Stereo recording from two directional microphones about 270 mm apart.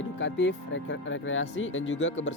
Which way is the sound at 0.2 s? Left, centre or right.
Left.